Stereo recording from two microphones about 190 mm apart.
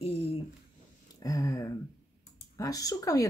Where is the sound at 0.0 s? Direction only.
30° left (ahead or behind).